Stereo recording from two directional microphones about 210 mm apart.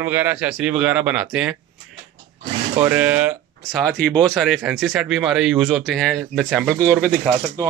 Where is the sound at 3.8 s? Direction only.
5° left (ahead or behind).